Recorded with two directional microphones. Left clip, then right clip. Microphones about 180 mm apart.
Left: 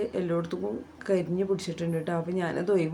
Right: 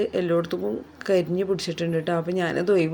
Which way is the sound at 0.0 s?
15° right (ahead or behind).